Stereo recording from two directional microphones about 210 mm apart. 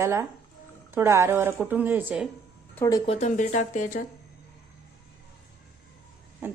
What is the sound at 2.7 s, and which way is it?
Speech, 15° left (ahead or behind).